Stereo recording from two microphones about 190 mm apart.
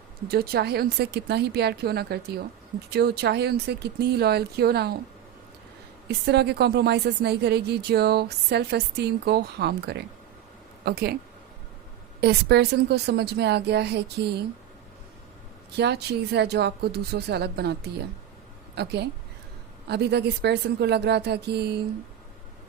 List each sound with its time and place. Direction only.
0.3 s a woman's voice: 55° right (ahead or behind)
6.1 s a woman's voice: 60° right (ahead or behind)
12.2 s a woman's voice: 60° right (ahead or behind)
15.7 s a woman's voice: 60° right (ahead or behind)